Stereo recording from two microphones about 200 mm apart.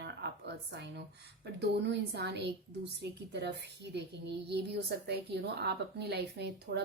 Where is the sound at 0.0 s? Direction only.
55° right (ahead or behind).